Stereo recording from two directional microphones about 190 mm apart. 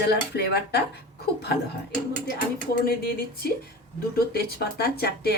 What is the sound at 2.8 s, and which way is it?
Speech, 50° left (ahead or behind).